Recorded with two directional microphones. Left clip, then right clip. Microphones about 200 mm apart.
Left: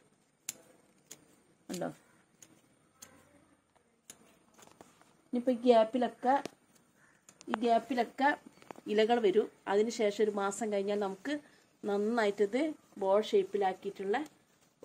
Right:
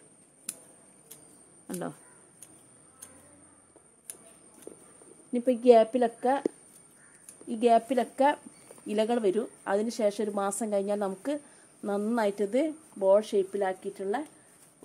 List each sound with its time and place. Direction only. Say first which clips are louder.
1.7 s speech: right 2 dB; 30° right (ahead or behind)
5.3 s a woman's voice: right 6 dB; 45° right (ahead or behind)
7.4 s a woman's voice: right 6 dB; 50° right (ahead or behind)